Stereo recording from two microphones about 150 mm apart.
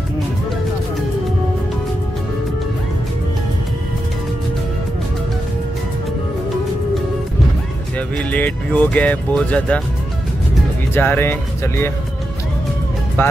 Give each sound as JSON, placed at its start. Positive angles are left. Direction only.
{"t": 8.2, "sound": "speech", "side_deg": 10}
{"t": 11.0, "sound": "speech", "side_deg": 15}
{"t": 13.2, "sound": "speech", "side_deg": 15}